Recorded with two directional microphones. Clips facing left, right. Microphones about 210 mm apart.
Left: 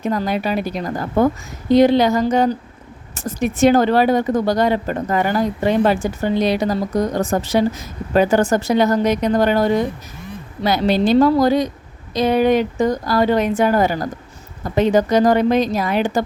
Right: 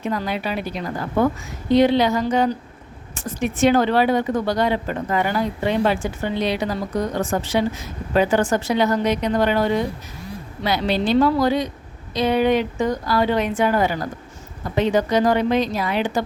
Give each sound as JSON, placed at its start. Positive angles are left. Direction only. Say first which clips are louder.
{"t": 0.0, "sound": "speech", "louder": "left 4 dB", "side_deg": 45}